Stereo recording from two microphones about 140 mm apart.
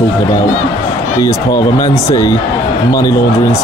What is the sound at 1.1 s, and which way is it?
Speech, 25° left (ahead or behind).